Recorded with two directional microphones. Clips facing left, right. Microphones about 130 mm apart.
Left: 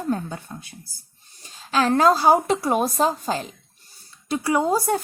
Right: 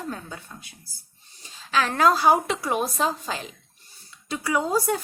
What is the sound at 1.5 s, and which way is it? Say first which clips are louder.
A woman's voice: left 4 dB; 40° left (ahead or behind).